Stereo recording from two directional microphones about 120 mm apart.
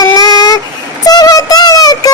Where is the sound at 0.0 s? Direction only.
30° left (ahead or behind).